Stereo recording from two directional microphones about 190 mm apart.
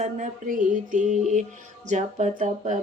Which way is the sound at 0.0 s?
45° right (ahead or behind).